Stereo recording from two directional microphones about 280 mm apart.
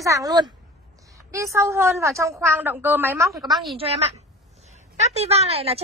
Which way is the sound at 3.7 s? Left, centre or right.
Right.